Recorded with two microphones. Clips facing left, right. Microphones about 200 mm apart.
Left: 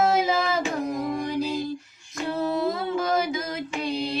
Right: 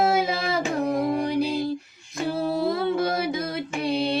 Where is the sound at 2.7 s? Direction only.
60° right (ahead or behind).